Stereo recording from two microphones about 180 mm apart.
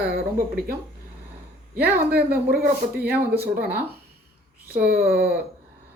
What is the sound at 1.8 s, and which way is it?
Speech, 60° right (ahead or behind).